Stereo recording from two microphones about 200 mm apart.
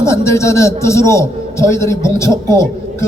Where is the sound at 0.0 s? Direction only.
15° left (ahead or behind).